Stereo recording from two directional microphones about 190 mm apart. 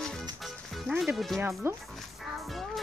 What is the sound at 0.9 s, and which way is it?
Speech, 5° right (ahead or behind).